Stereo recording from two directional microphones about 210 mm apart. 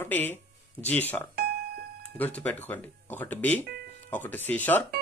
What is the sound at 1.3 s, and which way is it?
Music, 50° right (ahead or behind).